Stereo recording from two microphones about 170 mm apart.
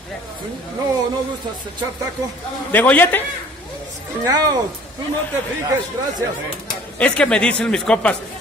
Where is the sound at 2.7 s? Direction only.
10° left (ahead or behind).